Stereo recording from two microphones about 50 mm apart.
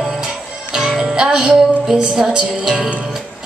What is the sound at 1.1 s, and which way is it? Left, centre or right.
Music, centre.